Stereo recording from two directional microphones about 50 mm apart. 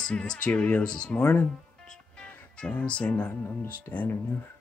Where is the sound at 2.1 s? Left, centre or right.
Left.